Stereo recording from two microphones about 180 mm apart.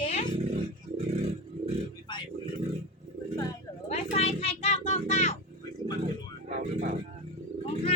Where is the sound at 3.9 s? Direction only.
35° left (ahead or behind).